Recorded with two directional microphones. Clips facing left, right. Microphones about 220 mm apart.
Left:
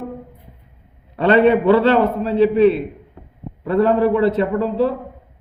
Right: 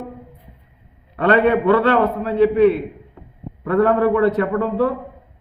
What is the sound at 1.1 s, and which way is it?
A man's voice, 25° left (ahead or behind).